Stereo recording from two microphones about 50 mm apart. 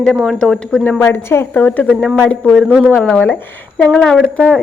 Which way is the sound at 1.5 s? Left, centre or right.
Left.